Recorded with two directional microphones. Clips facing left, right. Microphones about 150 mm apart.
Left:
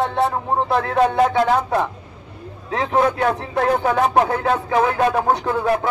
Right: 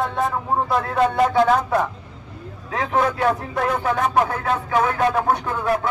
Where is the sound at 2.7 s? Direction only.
30° left (ahead or behind).